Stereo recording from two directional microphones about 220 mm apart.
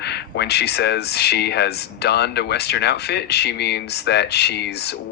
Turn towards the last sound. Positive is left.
turn(degrees=50)  # may be behind; listen again after turning